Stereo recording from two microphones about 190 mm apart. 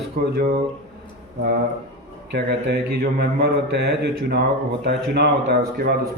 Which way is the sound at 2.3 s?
60° right (ahead or behind).